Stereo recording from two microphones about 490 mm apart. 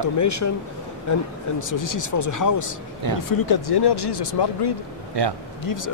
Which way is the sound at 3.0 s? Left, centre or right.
Right.